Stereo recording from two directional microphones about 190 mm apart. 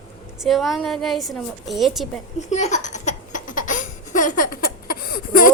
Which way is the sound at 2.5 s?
40° left (ahead or behind).